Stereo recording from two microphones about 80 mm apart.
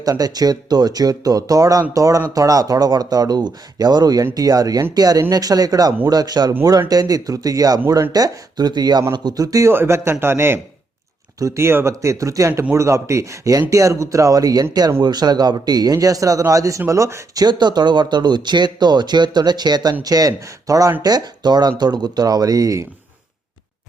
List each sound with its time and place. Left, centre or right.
0.0 s a man's voice: right
9.7 s speech: right
11.3 s a man's voice: right
17.4 s speech: right
21.0 s speech: right